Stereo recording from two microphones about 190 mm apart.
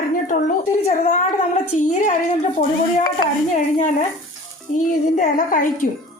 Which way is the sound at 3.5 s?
40° left (ahead or behind).